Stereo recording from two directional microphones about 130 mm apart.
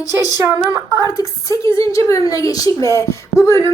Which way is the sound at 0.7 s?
30° right (ahead or behind).